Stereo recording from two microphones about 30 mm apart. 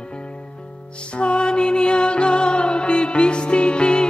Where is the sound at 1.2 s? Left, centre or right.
Left.